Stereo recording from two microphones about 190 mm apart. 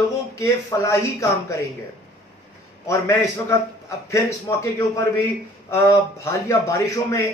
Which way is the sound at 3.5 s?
15° left (ahead or behind).